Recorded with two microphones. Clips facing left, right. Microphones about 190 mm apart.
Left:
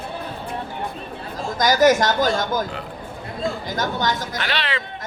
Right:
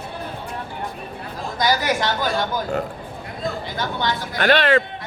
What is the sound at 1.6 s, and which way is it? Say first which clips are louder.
A woman's voice: left 5 dB; 45° left (ahead or behind).